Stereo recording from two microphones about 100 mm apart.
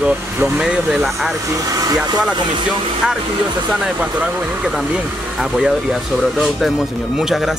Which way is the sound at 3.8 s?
10° right (ahead or behind).